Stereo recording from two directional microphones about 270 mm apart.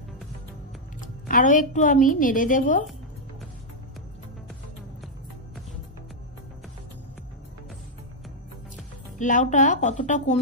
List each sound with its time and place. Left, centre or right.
1.0 s a woman's voice: left
9.2 s a woman's voice: left